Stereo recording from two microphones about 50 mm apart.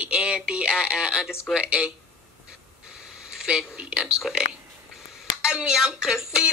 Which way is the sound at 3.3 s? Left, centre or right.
Centre.